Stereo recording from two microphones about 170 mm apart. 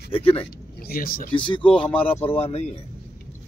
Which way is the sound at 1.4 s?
30° left (ahead or behind).